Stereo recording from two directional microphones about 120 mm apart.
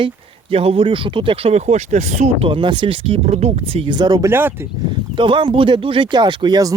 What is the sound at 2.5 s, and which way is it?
Speech, 40° right (ahead or behind).